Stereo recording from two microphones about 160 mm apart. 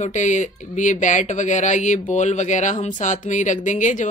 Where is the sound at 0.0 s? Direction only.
50° left (ahead or behind).